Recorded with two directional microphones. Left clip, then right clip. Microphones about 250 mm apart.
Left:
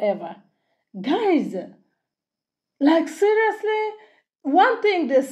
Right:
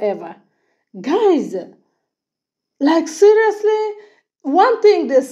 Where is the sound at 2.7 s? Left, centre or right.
Centre.